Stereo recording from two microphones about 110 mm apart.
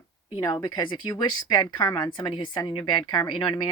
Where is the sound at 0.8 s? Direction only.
45° left (ahead or behind).